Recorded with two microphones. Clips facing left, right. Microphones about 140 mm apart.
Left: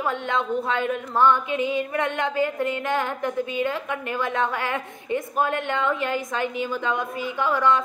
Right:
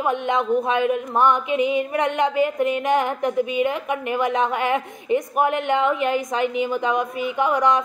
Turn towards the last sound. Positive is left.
turn(degrees=-20)  # may be behind; listen again after turning